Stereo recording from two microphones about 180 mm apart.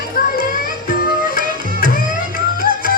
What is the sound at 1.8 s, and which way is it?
Music, 50° right (ahead or behind).